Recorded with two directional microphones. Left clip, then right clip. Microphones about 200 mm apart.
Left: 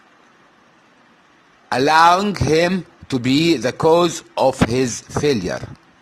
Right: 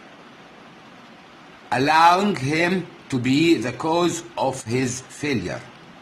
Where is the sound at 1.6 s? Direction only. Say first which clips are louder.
Left 3 dB; 35° left (ahead or behind).